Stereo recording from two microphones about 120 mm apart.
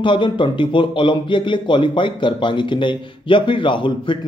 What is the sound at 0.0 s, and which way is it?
Speech, 40° left (ahead or behind).